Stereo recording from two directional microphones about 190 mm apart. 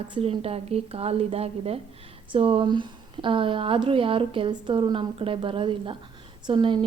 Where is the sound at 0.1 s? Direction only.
30° right (ahead or behind).